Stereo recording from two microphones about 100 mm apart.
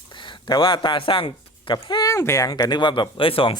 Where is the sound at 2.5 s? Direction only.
40° left (ahead or behind); by 3.6 s 60° left (ahead or behind).